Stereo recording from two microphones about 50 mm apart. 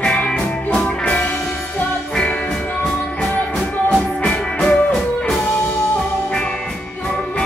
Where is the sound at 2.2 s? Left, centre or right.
Centre.